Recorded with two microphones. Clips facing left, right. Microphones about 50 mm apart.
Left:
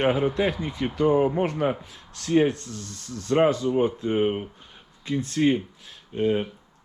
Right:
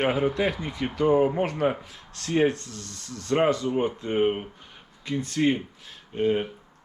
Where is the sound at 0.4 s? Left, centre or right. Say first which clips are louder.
Left 1 dB; right.